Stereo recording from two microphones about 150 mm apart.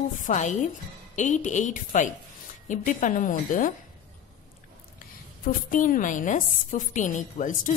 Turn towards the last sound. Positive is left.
turn(degrees=60)  # may be behind; listen again after turning